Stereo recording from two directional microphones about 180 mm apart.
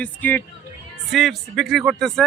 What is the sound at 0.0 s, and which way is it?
Speech, 10° left (ahead or behind).